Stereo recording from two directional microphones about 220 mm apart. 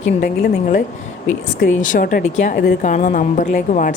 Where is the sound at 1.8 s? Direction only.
35° left (ahead or behind).